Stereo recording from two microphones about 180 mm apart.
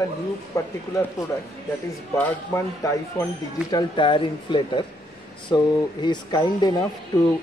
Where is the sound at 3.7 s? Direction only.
25° left (ahead or behind).